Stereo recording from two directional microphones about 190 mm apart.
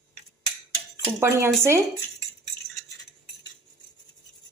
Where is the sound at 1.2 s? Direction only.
15° right (ahead or behind).